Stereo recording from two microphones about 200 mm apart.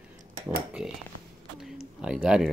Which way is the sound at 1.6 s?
Centre (ahead or behind).